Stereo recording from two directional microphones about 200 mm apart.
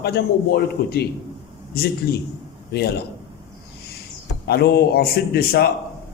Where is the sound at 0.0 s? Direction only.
55° left (ahead or behind).